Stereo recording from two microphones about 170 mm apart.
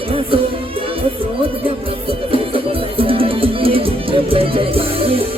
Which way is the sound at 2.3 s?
30° right (ahead or behind).